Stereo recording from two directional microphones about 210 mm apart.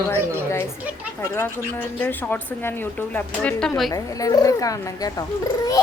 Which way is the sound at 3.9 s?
15° left (ahead or behind).